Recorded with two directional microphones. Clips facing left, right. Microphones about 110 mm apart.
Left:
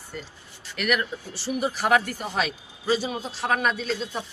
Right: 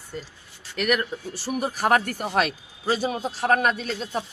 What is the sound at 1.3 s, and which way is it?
Speech, 45° right (ahead or behind).